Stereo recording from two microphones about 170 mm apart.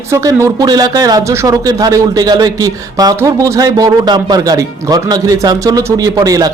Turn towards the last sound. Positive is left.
turn(degrees=-20)  # may be behind; listen again after turning